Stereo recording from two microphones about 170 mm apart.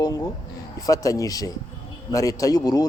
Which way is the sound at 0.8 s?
20° left (ahead or behind).